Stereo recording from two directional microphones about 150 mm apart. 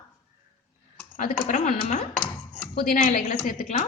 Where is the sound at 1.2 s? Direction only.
65° left (ahead or behind).